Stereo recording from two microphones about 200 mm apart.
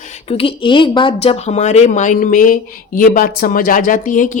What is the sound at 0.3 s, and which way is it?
A woman's voice, 25° left (ahead or behind).